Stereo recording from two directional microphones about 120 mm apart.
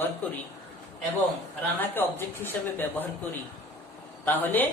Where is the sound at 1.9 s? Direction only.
15° left (ahead or behind).